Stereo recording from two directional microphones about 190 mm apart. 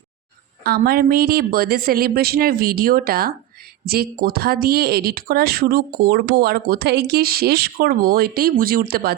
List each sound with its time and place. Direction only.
0.6 s speech: 55° right (ahead or behind)